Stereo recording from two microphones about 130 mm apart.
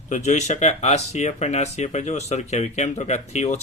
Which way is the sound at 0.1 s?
65° left (ahead or behind).